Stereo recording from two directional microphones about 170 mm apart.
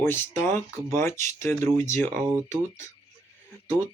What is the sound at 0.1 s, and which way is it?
Speech, 15° left (ahead or behind).